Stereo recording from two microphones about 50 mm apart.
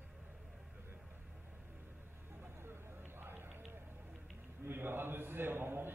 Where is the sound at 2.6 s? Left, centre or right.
Right.